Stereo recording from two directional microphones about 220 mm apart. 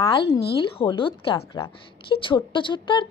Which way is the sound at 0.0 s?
20° left (ahead or behind).